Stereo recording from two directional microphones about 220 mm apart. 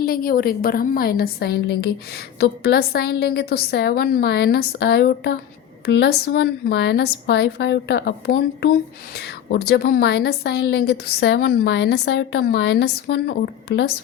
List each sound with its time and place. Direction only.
0.0 s a woman's voice: 40° left (ahead or behind)